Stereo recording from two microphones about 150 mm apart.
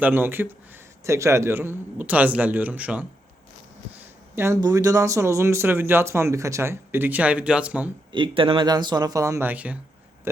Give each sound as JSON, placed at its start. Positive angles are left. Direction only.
{"t": 0.0, "sound": "speech", "side_deg": -15}
{"t": 4.4, "sound": "speech", "side_deg": -20}
{"t": 8.1, "sound": "speech", "side_deg": -35}